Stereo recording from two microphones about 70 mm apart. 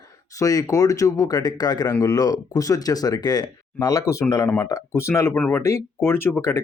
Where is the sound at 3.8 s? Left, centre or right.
Left.